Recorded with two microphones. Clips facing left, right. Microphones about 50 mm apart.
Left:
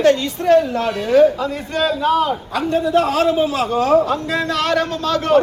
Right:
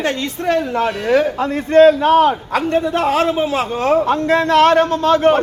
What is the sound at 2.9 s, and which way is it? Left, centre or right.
A man's voice, right.